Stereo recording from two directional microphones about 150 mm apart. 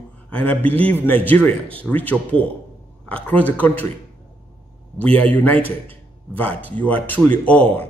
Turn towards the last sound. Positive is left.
turn(degrees=10)  # may be behind; listen again after turning